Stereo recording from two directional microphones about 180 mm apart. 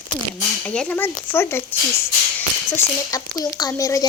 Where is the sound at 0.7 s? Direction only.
5° left (ahead or behind).